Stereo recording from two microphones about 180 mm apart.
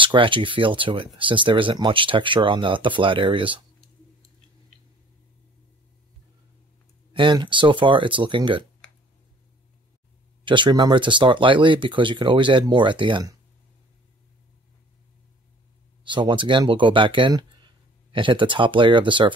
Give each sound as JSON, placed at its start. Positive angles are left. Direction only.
{"t": 0.0, "sound": "speech", "side_deg": -30}
{"t": 7.2, "sound": "speech", "side_deg": -25}
{"t": 10.4, "sound": "speech", "side_deg": -25}
{"t": 16.0, "sound": "speech", "side_deg": -25}